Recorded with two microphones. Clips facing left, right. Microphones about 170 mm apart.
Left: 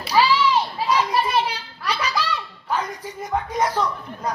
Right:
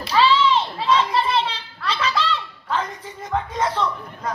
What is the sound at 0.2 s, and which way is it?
Children playing, 25° right (ahead or behind).